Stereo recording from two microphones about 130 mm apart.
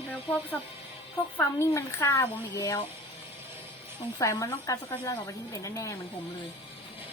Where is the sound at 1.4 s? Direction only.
20° left (ahead or behind).